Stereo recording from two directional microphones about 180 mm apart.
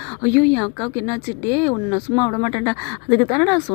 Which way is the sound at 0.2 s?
10° left (ahead or behind).